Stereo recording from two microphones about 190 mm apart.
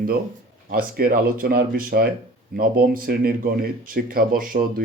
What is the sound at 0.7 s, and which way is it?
Speech, 50° right (ahead or behind).